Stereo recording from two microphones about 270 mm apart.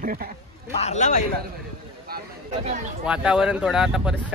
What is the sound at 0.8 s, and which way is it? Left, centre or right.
Speech, left.